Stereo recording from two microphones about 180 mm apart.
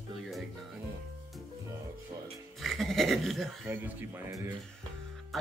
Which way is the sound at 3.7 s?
10° right (ahead or behind).